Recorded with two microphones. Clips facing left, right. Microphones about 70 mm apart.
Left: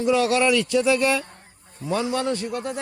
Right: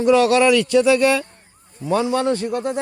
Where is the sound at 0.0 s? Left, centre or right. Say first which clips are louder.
Right 5 dB; right.